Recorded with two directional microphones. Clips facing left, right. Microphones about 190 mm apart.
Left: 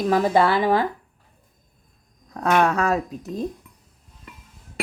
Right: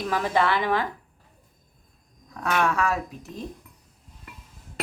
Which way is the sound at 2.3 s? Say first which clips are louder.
Left 5 dB; 40° left (ahead or behind).